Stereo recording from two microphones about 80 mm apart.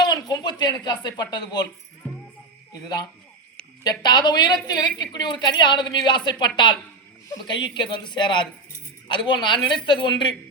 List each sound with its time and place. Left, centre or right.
0.0 s speech: left
2.7 s a woman's voice: left